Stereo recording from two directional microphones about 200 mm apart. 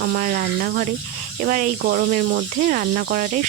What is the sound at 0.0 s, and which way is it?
Speech, 50° right (ahead or behind).